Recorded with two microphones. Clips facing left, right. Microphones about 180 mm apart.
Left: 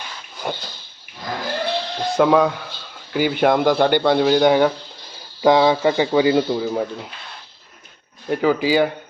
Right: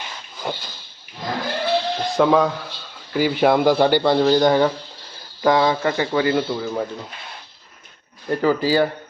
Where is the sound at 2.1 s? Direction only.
Centre (ahead or behind); by 6.7 s 20° left (ahead or behind).